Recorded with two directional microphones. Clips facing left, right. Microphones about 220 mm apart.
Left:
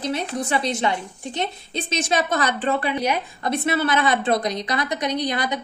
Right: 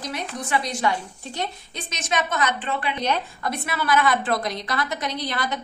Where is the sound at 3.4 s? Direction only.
25° left (ahead or behind).